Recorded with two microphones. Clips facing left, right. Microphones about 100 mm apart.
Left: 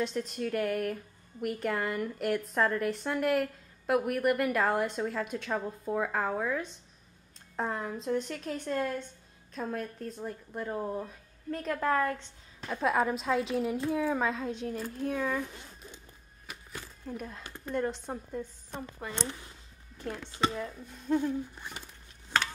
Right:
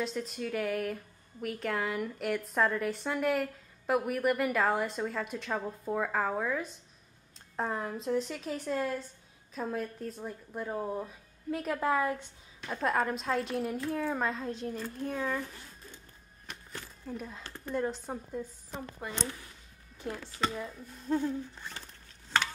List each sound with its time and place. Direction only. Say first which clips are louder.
0.0 s a woman's voice: left 2 dB; centre (ahead or behind)
12.7 s a woman's voice: left 2 dB; 5° left (ahead or behind)
14.8 s humming: left 3 dB; 5° left (ahead or behind)
15.3 s zipper: left 2 dB; 15° left (ahead or behind)
16.4 s a woman's voice: left 1 dB; 5° left (ahead or behind)
21.2 s humming: left 1 dB; 15° left (ahead or behind)
22.3 s stir: even; 15° left (ahead or behind)